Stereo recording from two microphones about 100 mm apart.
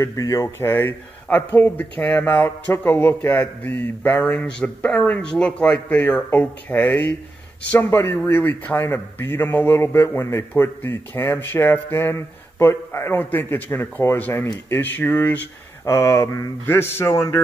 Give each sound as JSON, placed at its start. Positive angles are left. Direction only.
{"t": 0.0, "sound": "a man's voice", "side_deg": 35}
{"t": 15.8, "sound": "a man's voice", "side_deg": 30}